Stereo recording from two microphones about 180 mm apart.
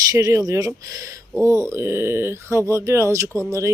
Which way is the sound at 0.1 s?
20° right (ahead or behind).